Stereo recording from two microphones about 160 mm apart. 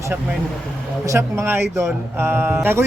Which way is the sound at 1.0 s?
15° right (ahead or behind).